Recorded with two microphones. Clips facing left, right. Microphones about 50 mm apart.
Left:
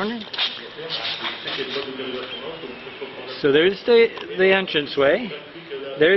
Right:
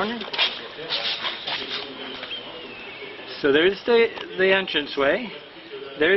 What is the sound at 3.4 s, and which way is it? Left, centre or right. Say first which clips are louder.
Speech: left 2 dB; centre.